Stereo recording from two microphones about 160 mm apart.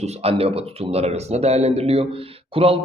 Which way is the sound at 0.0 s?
40° right (ahead or behind).